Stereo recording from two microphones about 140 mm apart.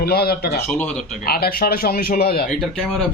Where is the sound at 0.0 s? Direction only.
90° left.